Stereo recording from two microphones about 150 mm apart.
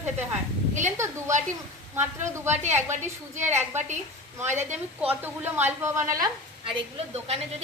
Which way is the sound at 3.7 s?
50° right (ahead or behind).